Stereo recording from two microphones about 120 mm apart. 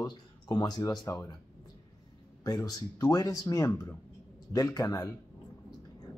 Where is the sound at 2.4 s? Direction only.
30° left (ahead or behind).